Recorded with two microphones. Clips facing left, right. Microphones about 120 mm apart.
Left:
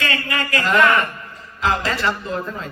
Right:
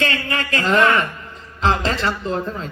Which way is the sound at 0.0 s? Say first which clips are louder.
Right 1 dB; 30° right (ahead or behind).